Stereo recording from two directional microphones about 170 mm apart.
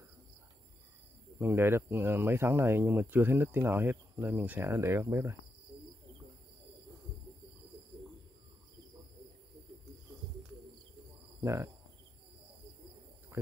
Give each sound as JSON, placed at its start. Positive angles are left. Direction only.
{"t": 1.4, "sound": "speech", "side_deg": -15}
{"t": 11.4, "sound": "speech", "side_deg": -15}